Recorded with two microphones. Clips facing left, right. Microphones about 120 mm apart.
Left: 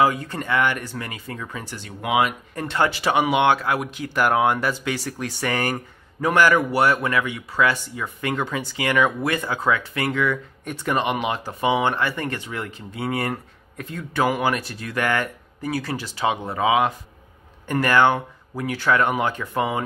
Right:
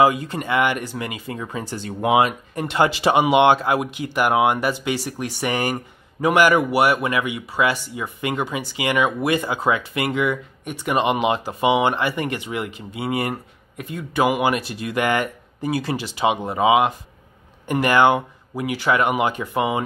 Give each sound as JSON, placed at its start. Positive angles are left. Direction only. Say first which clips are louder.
{"t": 0.3, "sound": "speech", "louder": "right 2 dB", "side_deg": -15}
{"t": 1.5, "sound": "speech", "louder": "right 6 dB", "side_deg": -30}
{"t": 2.5, "sound": "speech", "louder": "right 4 dB", "side_deg": -15}
{"t": 11.1, "sound": "speech", "louder": "right 4 dB", "side_deg": -25}